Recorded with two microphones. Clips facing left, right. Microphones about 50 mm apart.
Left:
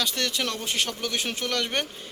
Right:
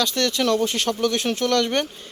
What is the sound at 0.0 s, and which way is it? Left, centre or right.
Speech, centre.